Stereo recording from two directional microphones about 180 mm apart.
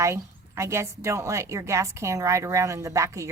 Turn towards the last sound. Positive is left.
turn(degrees=-15)  # may be behind; listen again after turning